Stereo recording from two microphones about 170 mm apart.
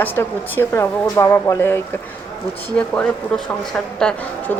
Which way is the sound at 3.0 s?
5° left (ahead or behind).